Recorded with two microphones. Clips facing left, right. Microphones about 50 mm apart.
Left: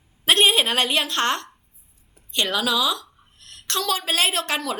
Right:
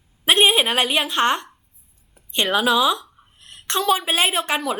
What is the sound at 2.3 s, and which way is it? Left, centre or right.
Speech, right.